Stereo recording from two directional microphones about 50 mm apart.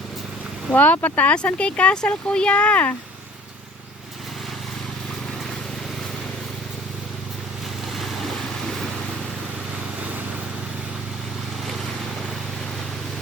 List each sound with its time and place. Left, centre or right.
0.7 s speech: left
7.9 s vehicle: centre